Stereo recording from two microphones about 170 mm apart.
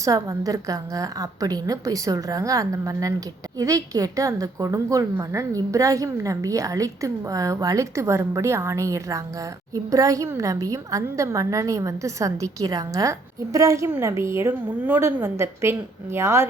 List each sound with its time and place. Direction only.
0.0 s a woman's voice: 20° right (ahead or behind)